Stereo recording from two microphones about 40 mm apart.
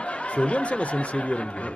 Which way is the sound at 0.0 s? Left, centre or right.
Left.